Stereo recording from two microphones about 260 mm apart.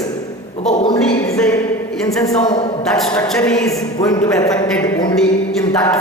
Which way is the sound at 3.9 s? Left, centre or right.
Centre.